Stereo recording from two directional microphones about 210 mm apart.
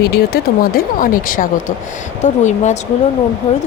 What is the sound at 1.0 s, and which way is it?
Speech, 40° left (ahead or behind).